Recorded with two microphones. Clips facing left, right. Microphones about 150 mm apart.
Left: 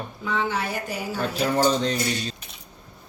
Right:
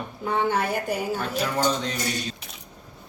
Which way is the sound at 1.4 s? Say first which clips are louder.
Left 5 dB; 35° left (ahead or behind).